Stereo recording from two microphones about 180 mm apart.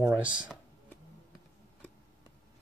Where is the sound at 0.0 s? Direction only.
15° right (ahead or behind).